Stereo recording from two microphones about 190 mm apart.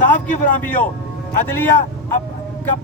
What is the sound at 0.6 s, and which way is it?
Speech, 10° left (ahead or behind).